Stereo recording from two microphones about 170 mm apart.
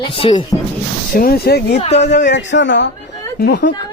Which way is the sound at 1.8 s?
40° left (ahead or behind).